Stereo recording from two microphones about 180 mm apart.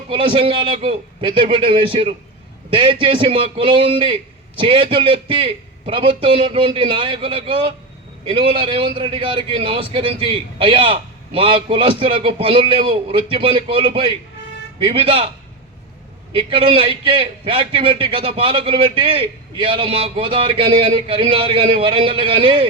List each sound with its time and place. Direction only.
0.1 s a man's voice: 30° right (ahead or behind)
16.5 s a man's voice: 30° right (ahead or behind)